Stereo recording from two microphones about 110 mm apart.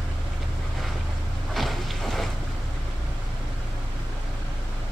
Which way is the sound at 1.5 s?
Centre (ahead or behind).